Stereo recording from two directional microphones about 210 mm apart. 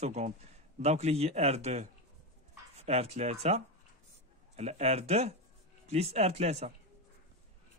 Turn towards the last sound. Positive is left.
turn(degrees=-30)  # may be behind; listen again after turning